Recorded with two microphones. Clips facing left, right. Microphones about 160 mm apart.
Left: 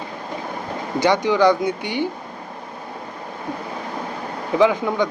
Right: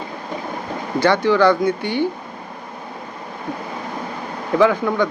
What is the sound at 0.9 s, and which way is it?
Speech, 20° left (ahead or behind).